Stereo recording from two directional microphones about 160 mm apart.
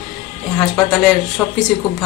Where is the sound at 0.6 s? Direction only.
5° left (ahead or behind).